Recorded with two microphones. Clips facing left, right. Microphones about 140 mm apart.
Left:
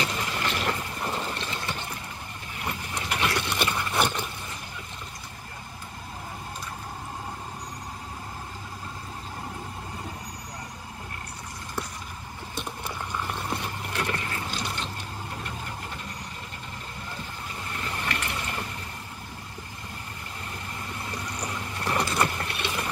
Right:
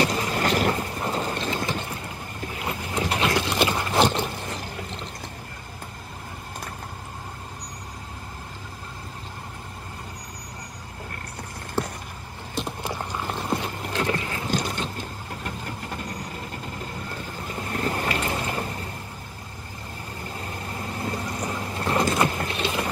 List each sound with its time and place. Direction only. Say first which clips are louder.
0.0 s vehicle: right 6 dB; 40° right (ahead or behind)
13.9 s a sound: right 5 dB; 25° right (ahead or behind)
14.5 s mechanisms: right 6 dB; 45° right (ahead or behind)
15.4 s vehicle: right 3 dB; 45° right (ahead or behind)
17.6 s vehicle: right 8 dB; 45° right (ahead or behind)
18.2 s a sound: right 6 dB; 30° right (ahead or behind)
20.7 s vehicle: right 7 dB; 35° right (ahead or behind)